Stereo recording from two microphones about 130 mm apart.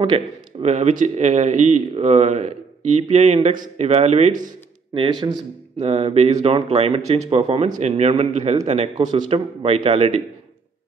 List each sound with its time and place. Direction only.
0.6 s speech: 60° right (ahead or behind)
3.4 s speech: 75° right (ahead or behind)
3.8 s speech: 55° right (ahead or behind); by 4.6 s 85° right
5.2 s a man's voice: 35° right (ahead or behind)
5.8 s speech: 50° right (ahead or behind)
8.9 s speech: 35° right (ahead or behind); by 10.2 s 50° right (ahead or behind)